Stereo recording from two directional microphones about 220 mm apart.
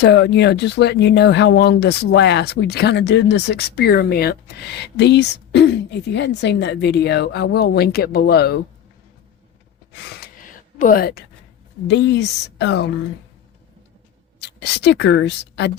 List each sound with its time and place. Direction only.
0.0 s speech: 50° left (ahead or behind)
9.9 s gasp: 40° left (ahead or behind)
11.9 s speech: 50° left (ahead or behind)
14.4 s speech: 50° left (ahead or behind)